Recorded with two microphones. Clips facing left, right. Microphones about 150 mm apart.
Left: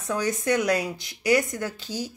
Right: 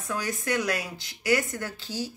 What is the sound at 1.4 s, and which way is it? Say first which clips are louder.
Speech: left 4 dB; 15° left (ahead or behind).